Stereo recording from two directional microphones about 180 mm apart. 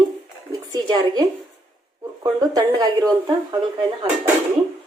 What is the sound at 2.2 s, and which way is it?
Speech, 20° right (ahead or behind).